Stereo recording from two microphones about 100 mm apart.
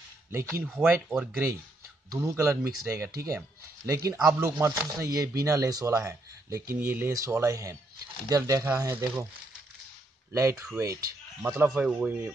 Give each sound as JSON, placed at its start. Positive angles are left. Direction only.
{"t": 0.3, "sound": "speech", "side_deg": -25}
{"t": 2.1, "sound": "speech", "side_deg": -30}
{"t": 10.3, "sound": "speech", "side_deg": -30}
{"t": 11.4, "sound": "speech", "side_deg": -10}